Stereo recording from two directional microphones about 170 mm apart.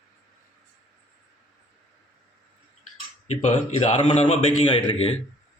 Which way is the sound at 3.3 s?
45° left (ahead or behind).